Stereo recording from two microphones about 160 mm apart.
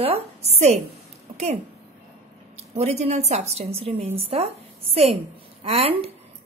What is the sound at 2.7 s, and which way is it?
A woman's voice, 45° right (ahead or behind).